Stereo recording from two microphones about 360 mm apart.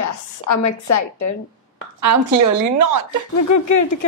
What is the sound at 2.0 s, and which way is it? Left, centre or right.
A woman's voice, right.